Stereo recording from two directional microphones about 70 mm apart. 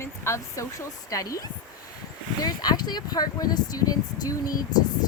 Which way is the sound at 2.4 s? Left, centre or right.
Left.